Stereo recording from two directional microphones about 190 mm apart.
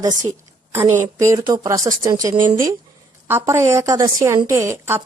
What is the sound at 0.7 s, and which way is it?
A woman's voice, 15° right (ahead or behind).